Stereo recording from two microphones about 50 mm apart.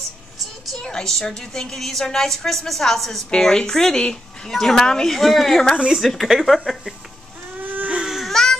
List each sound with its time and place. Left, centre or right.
0.7 s a woman's voice: centre
7.6 s baby cry: right
8.0 s goat: centre
8.3 s cat: centre